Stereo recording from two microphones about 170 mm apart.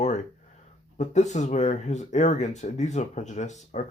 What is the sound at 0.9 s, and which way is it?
Speech, 45° left (ahead or behind).